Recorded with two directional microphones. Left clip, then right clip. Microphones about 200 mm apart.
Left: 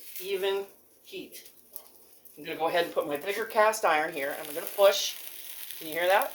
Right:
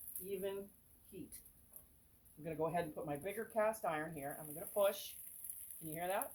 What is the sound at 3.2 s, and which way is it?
Speech, 40° left (ahead or behind).